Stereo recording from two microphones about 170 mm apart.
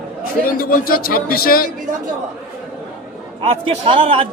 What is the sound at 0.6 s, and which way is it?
Speech, 60° left (ahead or behind).